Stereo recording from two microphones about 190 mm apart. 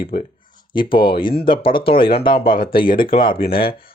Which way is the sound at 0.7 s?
25° left (ahead or behind).